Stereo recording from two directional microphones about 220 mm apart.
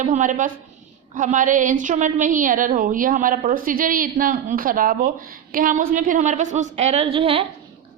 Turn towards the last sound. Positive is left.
turn(degrees=-25)  # may be behind; listen again after turning